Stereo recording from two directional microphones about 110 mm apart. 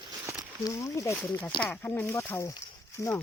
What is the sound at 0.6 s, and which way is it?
Speech, 30° left (ahead or behind).